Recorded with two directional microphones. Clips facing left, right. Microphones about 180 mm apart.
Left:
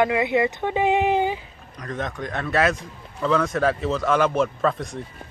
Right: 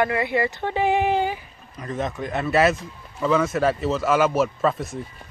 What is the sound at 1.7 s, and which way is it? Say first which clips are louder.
Speech: right 2 dB; 5° right (ahead or behind).